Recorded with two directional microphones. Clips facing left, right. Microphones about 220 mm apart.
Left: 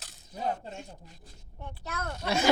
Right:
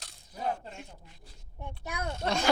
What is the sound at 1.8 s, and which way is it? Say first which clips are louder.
Speech: right 1 dB; 10° right (ahead or behind).